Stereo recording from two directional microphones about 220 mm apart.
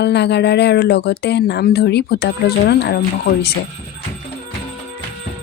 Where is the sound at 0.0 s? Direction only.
50° left (ahead or behind).